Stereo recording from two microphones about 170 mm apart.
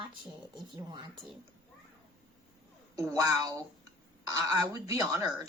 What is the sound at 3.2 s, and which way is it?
Speech, 20° right (ahead or behind).